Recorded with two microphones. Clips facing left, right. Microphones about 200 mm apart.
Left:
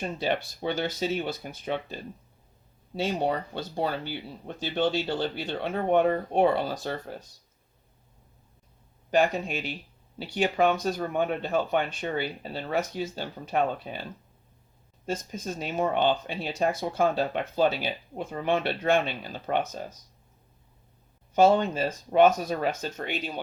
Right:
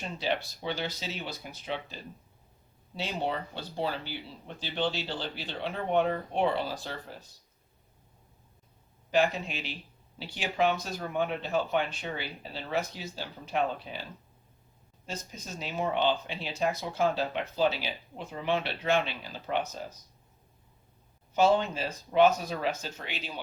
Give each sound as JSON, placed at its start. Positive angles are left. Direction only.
{"t": 0.0, "sound": "speech", "side_deg": 50}
{"t": 9.0, "sound": "speech", "side_deg": 50}
{"t": 15.0, "sound": "speech", "side_deg": 50}
{"t": 21.3, "sound": "speech", "side_deg": 50}